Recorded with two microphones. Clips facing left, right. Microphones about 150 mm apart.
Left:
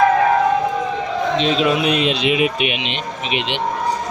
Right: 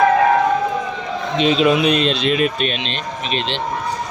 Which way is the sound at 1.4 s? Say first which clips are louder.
Right 5 dB; centre (ahead or behind).